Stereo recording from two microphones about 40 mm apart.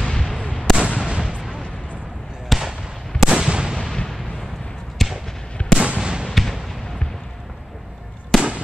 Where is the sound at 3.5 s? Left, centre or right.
Right.